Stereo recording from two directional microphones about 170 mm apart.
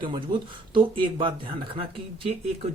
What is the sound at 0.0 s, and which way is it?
Speech, 30° right (ahead or behind).